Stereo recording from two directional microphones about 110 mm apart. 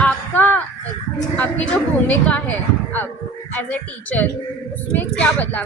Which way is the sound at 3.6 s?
15° left (ahead or behind).